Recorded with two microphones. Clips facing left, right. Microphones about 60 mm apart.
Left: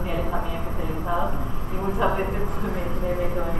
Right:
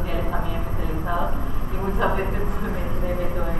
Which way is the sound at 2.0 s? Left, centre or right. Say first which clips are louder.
Even; centre.